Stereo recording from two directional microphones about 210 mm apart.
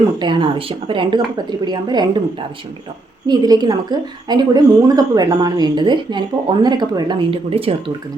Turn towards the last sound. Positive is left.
turn(degrees=-25)  # may be behind; listen again after turning